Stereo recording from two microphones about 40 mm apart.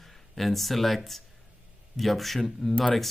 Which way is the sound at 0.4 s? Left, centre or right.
Centre.